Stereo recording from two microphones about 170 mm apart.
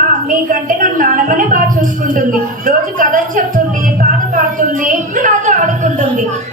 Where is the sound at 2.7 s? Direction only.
50° right (ahead or behind).